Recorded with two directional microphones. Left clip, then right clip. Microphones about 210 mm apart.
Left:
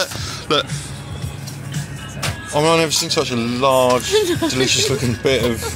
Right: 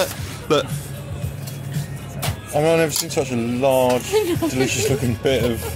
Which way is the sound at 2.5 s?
Centre (ahead or behind).